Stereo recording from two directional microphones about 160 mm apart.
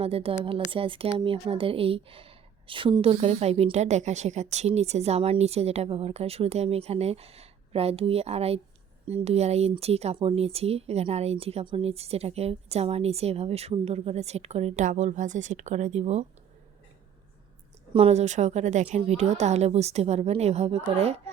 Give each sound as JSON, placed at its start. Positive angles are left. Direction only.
{"t": 0.0, "sound": "speech", "side_deg": -35}
{"t": 17.9, "sound": "a woman's voice", "side_deg": -40}